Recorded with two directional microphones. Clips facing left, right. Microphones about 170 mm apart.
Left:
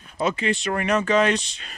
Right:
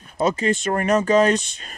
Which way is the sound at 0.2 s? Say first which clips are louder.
Right 3 dB; 40° right (ahead or behind).